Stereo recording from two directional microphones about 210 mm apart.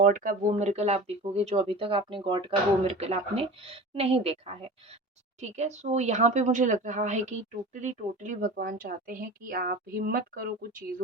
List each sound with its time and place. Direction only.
0.0 s speech: 40° right (ahead or behind)